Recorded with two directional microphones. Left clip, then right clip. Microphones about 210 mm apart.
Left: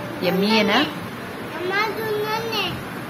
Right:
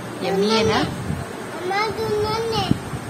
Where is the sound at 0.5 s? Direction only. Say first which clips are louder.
Left 2 dB; 10° left (ahead or behind).